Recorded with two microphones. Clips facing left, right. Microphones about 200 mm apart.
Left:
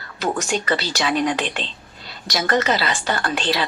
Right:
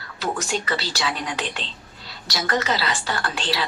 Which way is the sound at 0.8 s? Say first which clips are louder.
Left 7 dB; 50° left (ahead or behind).